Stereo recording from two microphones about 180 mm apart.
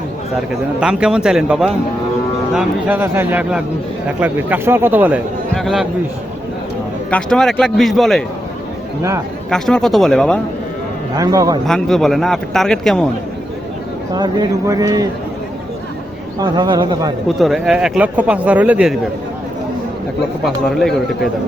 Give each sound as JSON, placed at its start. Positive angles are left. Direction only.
{"t": 0.8, "sound": "speech", "side_deg": -5}
{"t": 7.1, "sound": "speech", "side_deg": 5}
{"t": 9.5, "sound": "speech", "side_deg": 5}
{"t": 11.1, "sound": "speech", "side_deg": -20}
{"t": 11.6, "sound": "speech", "side_deg": 0}
{"t": 14.2, "sound": "speech", "side_deg": -25}
{"t": 16.4, "sound": "speech", "side_deg": -25}
{"t": 17.2, "sound": "speech", "side_deg": 0}
{"t": 20.4, "sound": "speech", "side_deg": 0}